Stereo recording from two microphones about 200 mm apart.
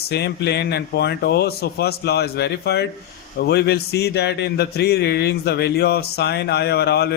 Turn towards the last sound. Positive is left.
turn(degrees=55)  # may be behind; listen again after turning